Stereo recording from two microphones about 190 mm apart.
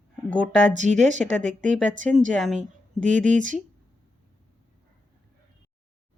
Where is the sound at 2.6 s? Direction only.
40° right (ahead or behind).